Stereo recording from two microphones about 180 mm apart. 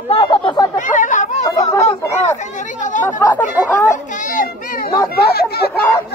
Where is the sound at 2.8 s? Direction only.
45° left (ahead or behind).